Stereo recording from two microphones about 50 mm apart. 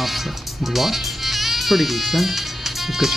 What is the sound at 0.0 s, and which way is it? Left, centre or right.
Speech, centre.